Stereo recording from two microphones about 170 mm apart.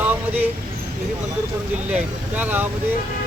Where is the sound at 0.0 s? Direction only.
10° right (ahead or behind).